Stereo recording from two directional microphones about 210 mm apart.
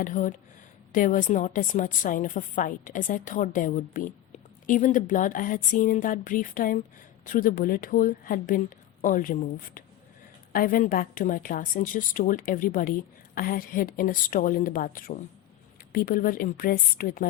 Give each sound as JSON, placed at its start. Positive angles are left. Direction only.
{"t": 0.0, "sound": "a woman's voice", "side_deg": 40}